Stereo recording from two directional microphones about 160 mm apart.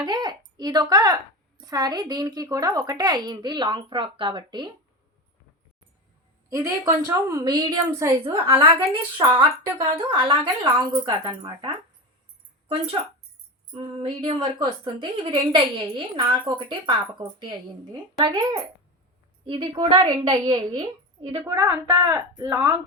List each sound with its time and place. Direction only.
0.0 s speech: 25° right (ahead or behind)
6.5 s speech: 20° right (ahead or behind)
8.5 s a woman's voice: 35° right (ahead or behind); by 22.8 s 20° right (ahead or behind)